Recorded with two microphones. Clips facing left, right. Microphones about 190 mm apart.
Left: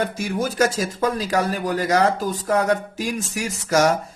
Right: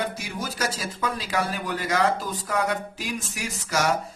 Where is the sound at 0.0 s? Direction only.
50° left (ahead or behind).